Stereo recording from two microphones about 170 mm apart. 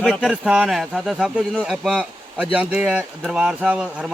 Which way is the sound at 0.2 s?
5° right (ahead or behind).